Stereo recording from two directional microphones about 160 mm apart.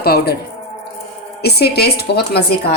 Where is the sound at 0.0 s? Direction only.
75° left (ahead or behind).